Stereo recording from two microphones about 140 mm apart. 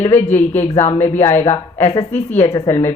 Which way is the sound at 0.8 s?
20° left (ahead or behind).